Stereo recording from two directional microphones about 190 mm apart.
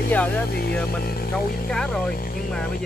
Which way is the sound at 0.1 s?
10° left (ahead or behind).